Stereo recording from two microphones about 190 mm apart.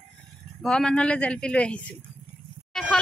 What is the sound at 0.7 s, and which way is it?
A man's voice, 5° left (ahead or behind).